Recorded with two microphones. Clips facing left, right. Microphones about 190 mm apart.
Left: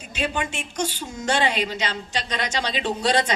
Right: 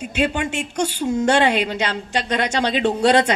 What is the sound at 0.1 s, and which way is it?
A woman's voice, 60° right (ahead or behind).